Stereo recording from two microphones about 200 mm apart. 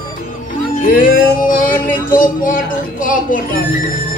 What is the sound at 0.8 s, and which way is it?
Music, 45° left (ahead or behind).